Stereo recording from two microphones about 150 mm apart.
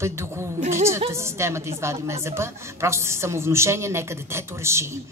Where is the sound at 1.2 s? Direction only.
20° right (ahead or behind).